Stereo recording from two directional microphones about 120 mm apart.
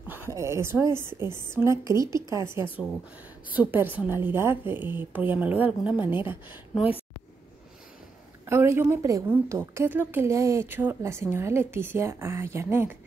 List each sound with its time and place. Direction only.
0.1 s a sound: 20° right (ahead or behind)
0.9 s a woman's voice: 20° right (ahead or behind)
8.5 s a woman's voice: 20° right (ahead or behind)